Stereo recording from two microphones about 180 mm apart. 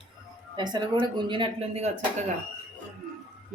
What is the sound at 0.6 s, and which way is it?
A woman's voice, 25° right (ahead or behind).